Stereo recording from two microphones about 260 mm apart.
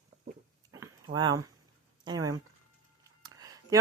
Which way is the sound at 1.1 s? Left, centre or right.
Centre.